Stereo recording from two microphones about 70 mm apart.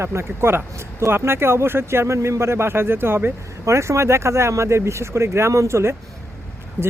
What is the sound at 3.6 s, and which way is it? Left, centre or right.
Speech, right.